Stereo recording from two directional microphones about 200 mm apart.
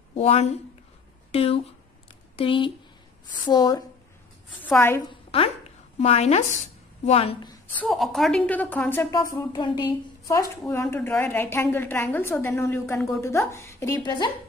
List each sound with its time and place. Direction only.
0.1 s a woman's voice: 30° left (ahead or behind); by 5.0 s 10° left (ahead or behind)
5.3 s a woman's voice: 30° left (ahead or behind)
7.8 s a woman's voice: centre (ahead or behind); by 14.3 s 20° left (ahead or behind)